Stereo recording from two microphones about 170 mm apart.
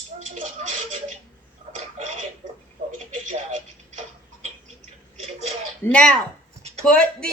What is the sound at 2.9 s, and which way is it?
Television, 50° right (ahead or behind).